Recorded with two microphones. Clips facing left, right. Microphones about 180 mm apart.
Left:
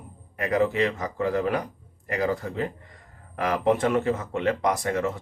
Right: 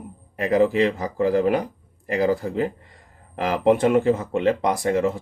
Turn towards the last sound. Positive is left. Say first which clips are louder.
# right 5 dB
turn(degrees=-30)  # may be behind; listen again after turning